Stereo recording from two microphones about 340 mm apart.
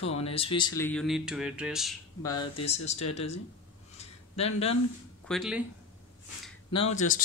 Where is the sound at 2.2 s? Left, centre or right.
Centre.